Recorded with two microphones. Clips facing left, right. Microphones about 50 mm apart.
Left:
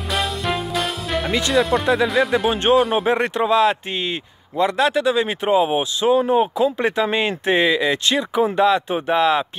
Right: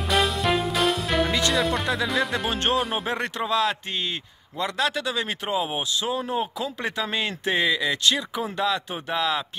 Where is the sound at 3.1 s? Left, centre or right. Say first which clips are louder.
Left 8 dB; left.